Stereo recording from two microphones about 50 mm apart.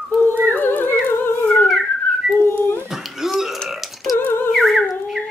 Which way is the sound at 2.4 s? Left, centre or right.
Left.